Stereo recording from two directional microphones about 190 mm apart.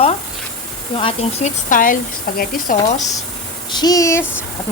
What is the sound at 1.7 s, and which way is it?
Speech, 45° left (ahead or behind).